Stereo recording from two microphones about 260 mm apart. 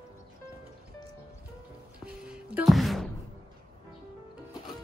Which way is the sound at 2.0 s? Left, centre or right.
Centre.